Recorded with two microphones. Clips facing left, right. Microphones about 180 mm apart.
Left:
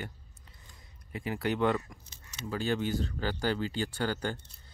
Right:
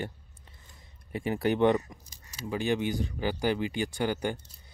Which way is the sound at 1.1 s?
25° right (ahead or behind).